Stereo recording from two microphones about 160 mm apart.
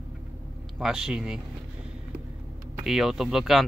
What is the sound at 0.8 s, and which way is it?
Speech, 5° right (ahead or behind).